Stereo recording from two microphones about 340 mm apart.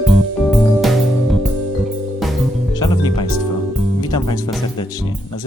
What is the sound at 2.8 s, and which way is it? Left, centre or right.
Music, centre.